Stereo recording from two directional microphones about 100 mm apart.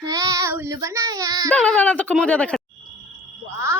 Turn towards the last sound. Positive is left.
turn(degrees=-30)  # may be behind; listen again after turning